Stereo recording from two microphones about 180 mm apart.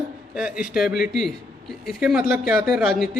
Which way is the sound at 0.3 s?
5° right (ahead or behind).